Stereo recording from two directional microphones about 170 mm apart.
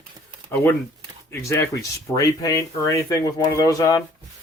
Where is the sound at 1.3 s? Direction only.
15° left (ahead or behind).